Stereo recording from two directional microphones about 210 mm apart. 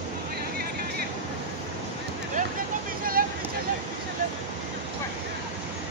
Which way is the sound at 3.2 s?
45° right (ahead or behind).